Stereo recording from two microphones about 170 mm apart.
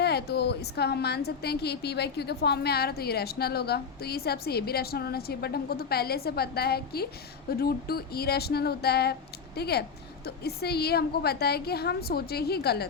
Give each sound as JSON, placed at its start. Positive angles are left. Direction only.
{"t": 0.0, "sound": "a woman's voice", "side_deg": 70}